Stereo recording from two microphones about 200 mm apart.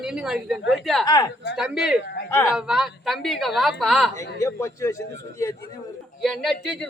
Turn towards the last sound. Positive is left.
turn(degrees=0)  # may be behind; listen again after turning